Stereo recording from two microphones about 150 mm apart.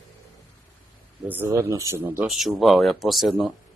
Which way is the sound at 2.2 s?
Centre (ahead or behind).